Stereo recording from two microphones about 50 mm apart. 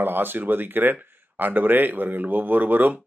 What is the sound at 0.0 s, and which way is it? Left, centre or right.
Speech, right.